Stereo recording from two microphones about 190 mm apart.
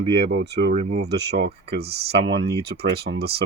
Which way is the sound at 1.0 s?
60° right (ahead or behind).